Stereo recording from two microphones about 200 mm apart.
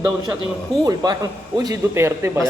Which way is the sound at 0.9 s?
20° right (ahead or behind).